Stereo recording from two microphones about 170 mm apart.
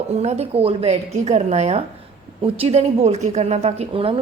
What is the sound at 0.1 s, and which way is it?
A woman's voice, 40° right (ahead or behind).